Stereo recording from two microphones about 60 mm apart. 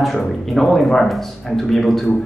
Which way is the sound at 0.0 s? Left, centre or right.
Centre.